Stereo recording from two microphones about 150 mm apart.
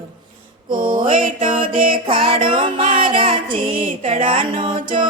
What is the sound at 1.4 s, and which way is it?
Music, 35° right (ahead or behind).